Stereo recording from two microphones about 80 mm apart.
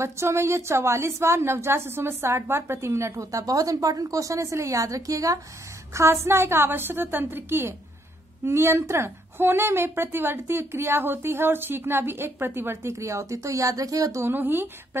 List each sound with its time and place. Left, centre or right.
0.0 s a woman's voice: right
5.9 s a woman's voice: right
12.9 s a woman's voice: right
14.2 s a woman's voice: right